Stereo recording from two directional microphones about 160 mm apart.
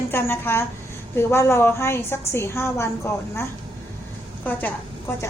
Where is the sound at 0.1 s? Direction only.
15° left (ahead or behind).